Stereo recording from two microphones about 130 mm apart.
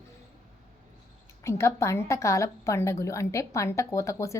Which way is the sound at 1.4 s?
20° left (ahead or behind).